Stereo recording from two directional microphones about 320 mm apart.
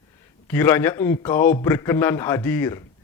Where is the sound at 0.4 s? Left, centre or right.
Centre.